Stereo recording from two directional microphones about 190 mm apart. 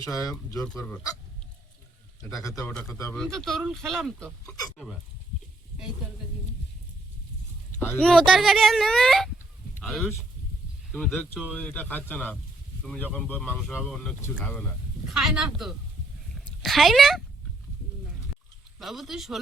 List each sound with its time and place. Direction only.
0.0 s speech: 20° left (ahead or behind)
2.6 s speech: 5° left (ahead or behind)
4.4 s speech: 20° left (ahead or behind)
7.8 s speech: 5° left (ahead or behind)
15.0 s speech: centre (ahead or behind)
18.8 s speech: centre (ahead or behind)